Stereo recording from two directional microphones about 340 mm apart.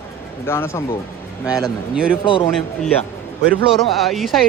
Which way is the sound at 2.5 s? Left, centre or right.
Centre.